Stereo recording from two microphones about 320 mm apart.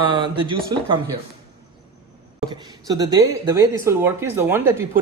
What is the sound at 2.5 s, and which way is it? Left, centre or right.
Speech, centre.